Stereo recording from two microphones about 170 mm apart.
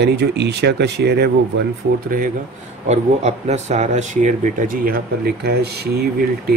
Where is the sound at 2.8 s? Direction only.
40° right (ahead or behind); by 5.0 s 55° right (ahead or behind).